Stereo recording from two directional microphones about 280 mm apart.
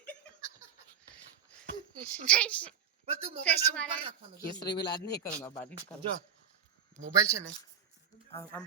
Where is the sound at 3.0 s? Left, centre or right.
Right.